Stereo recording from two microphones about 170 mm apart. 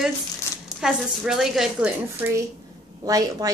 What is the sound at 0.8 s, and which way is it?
A woman's voice, centre (ahead or behind).